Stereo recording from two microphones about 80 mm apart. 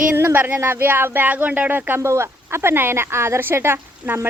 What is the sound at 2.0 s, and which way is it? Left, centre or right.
Speech, right.